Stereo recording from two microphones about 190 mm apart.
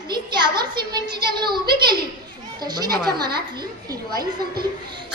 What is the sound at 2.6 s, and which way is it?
Speech, 20° right (ahead or behind).